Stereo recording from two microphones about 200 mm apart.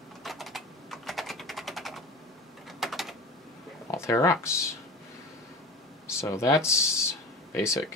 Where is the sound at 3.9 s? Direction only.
15° left (ahead or behind).